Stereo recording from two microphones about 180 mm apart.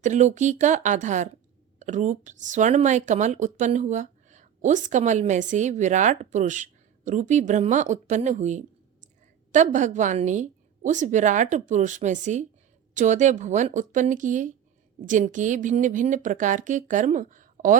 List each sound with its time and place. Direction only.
0.0 s speech: 40° right (ahead or behind)